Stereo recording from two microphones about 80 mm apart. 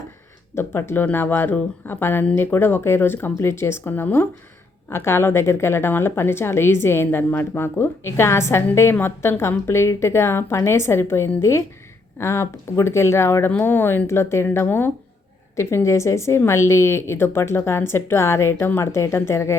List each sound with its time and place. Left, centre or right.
0.5 s a woman's voice: left
15.5 s a woman's voice: left